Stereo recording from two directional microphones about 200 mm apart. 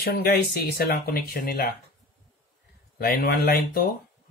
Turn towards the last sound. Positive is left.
turn(degrees=50)  # may be behind; listen again after turning